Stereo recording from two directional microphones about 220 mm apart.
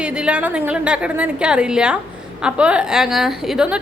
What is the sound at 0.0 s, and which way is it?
A woman's voice, 5° right (ahead or behind).